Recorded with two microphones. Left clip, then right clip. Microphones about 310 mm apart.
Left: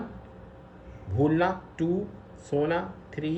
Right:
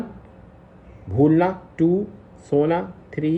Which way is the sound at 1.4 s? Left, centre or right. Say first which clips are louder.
Right 7 dB; centre.